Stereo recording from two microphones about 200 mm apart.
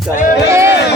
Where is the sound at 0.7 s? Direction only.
55° left (ahead or behind).